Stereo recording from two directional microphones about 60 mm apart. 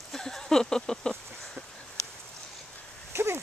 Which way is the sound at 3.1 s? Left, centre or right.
Right.